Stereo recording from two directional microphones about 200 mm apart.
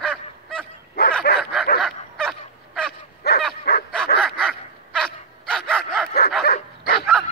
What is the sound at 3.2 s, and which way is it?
Dog, 55° left (ahead or behind).